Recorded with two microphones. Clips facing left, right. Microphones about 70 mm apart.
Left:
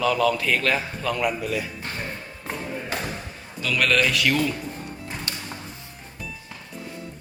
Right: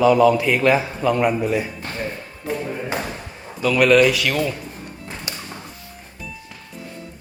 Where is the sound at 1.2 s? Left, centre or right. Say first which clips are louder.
Right 6 dB; right.